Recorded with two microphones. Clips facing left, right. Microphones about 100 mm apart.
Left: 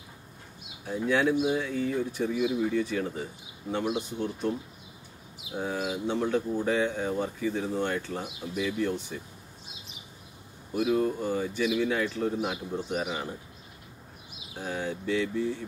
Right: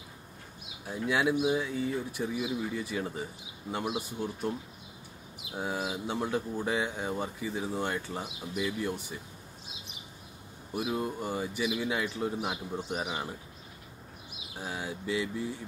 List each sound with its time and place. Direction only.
1.0 s speech: 10° right (ahead or behind)
5.6 s speech: 10° right (ahead or behind)
10.7 s speech: 15° right (ahead or behind)
14.6 s speech: 10° right (ahead or behind)